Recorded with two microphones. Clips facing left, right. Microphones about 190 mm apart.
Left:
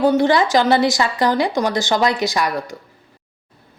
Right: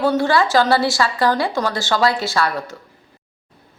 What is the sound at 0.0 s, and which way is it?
A woman's voice, 20° left (ahead or behind).